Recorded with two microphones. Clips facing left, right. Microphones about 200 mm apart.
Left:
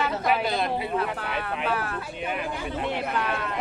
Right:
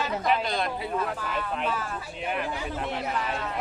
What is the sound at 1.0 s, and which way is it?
Speech, 65° left (ahead or behind).